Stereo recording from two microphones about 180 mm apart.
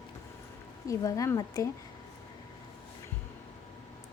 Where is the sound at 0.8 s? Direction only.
20° left (ahead or behind).